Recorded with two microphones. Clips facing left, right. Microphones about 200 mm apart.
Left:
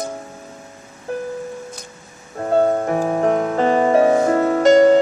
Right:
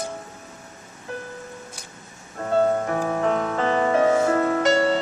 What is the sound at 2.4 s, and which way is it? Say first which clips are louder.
Music: left 4 dB; 35° left (ahead or behind).